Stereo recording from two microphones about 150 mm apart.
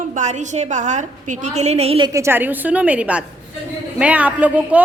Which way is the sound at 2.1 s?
20° right (ahead or behind).